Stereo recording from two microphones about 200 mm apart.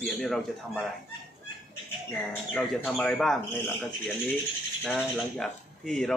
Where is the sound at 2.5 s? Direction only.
Centre (ahead or behind).